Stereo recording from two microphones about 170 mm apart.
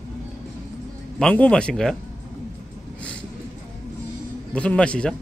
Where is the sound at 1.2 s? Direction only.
5° left (ahead or behind).